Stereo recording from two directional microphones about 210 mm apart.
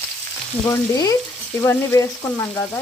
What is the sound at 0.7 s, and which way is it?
Frying, 15° left (ahead or behind).